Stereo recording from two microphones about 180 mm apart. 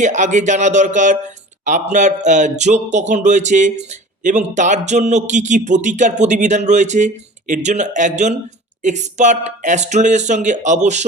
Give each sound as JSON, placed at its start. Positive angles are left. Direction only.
{"t": 0.0, "sound": "speech", "side_deg": -40}